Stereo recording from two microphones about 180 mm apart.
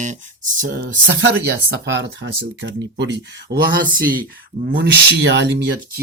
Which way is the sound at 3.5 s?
50° right (ahead or behind).